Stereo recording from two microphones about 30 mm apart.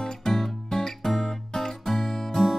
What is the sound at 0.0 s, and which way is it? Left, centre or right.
Music, centre.